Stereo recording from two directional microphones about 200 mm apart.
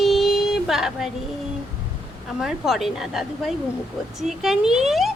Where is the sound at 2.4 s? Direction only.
Centre (ahead or behind).